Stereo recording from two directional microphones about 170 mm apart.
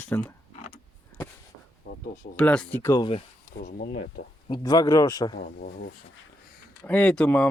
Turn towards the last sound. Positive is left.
turn(degrees=10)  # may be behind; listen again after turning